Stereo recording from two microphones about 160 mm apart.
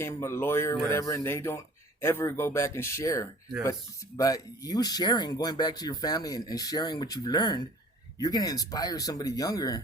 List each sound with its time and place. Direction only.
0.0 s speech: 15° left (ahead or behind)